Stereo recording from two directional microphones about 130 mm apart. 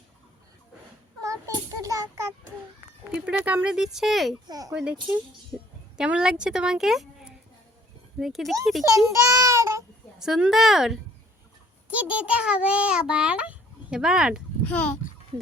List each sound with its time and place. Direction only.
1.2 s a sound: 25° right (ahead or behind)
3.1 s speech: 10° right (ahead or behind)
4.4 s speech: 30° right (ahead or behind)
4.7 s a child's voice: 10° right (ahead or behind)
6.0 s a woman's voice: 5° right (ahead or behind)
9.1 s child singing: 25° right (ahead or behind)
10.2 s a child's voice: 5° right (ahead or behind)
14.6 s a child's voice: 10° left (ahead or behind)